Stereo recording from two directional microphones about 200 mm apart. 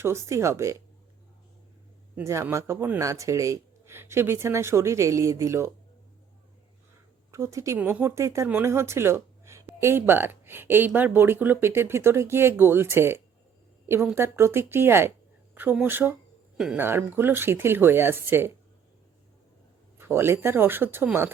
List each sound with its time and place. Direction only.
0.0 s speech: 15° right (ahead or behind)
2.1 s speech: 15° right (ahead or behind)
7.3 s speech: 15° right (ahead or behind)
20.0 s speech: 10° right (ahead or behind)